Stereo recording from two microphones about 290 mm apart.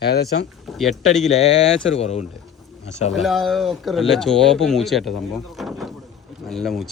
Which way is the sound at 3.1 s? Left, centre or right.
Centre.